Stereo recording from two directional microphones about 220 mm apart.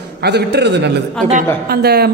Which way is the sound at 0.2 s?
50° right (ahead or behind).